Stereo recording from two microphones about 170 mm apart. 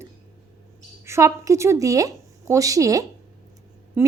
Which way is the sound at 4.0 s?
15° right (ahead or behind).